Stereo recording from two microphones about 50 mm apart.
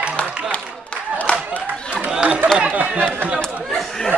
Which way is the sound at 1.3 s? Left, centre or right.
Left.